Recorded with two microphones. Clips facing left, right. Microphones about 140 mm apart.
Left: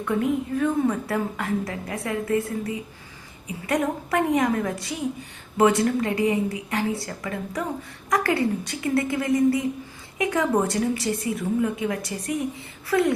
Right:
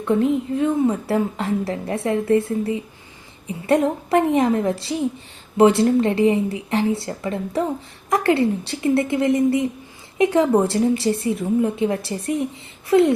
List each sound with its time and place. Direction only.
0.0 s a woman's voice: 25° right (ahead or behind)